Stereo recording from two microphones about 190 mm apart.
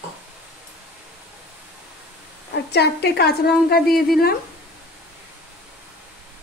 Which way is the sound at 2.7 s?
60° left (ahead or behind).